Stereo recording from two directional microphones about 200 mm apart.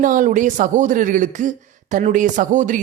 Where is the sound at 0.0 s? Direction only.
40° right (ahead or behind).